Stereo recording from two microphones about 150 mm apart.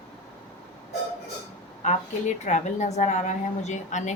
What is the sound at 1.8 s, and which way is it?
A woman's voice, 50° left (ahead or behind).